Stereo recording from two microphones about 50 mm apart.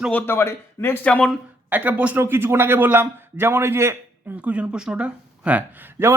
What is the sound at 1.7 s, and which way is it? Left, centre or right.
Speech, right.